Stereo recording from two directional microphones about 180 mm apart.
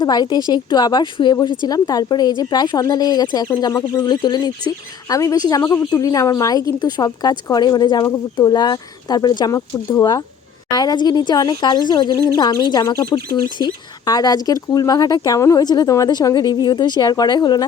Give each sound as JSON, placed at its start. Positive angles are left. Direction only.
{"t": 0.0, "sound": "a woman's voice", "side_deg": 20}